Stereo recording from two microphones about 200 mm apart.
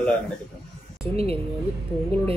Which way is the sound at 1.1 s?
30° right (ahead or behind).